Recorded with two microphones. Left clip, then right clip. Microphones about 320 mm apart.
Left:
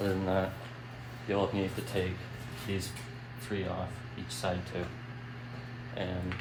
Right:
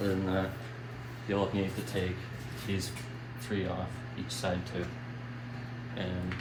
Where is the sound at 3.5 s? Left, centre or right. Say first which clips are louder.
Right 1 dB; centre.